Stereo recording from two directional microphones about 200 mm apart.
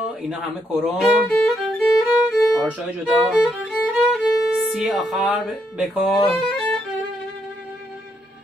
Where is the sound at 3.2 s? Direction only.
Centre (ahead or behind).